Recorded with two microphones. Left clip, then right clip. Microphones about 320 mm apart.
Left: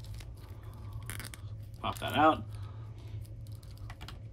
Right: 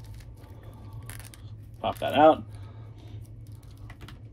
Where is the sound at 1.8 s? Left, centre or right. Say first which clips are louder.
Right 7 dB; centre.